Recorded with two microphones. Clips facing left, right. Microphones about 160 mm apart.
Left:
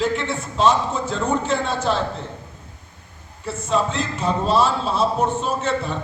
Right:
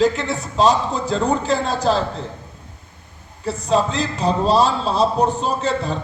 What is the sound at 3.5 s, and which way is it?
A man's voice, 35° right (ahead or behind).